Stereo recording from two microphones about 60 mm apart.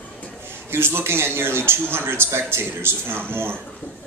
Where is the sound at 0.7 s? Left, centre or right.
Right.